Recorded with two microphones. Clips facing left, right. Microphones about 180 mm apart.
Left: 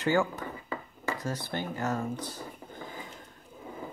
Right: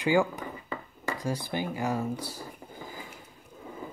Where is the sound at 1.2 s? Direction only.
10° right (ahead or behind).